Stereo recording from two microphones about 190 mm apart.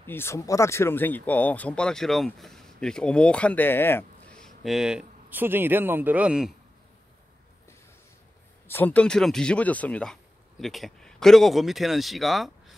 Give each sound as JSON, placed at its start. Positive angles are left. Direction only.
{"t": 0.0, "sound": "speech", "side_deg": 10}
{"t": 8.6, "sound": "speech", "side_deg": 10}